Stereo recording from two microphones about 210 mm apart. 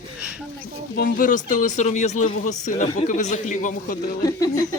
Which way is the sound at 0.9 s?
40° left (ahead or behind).